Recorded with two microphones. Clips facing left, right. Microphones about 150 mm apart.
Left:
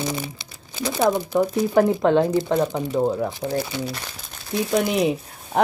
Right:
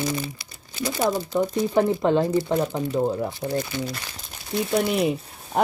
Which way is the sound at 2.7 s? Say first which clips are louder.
Left 2 dB; 15° left (ahead or behind).